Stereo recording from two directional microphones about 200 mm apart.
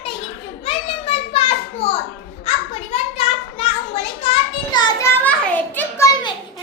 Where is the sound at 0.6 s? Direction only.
30° left (ahead or behind).